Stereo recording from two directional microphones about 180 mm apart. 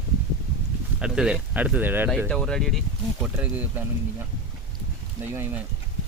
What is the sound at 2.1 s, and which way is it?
Speech, centre (ahead or behind).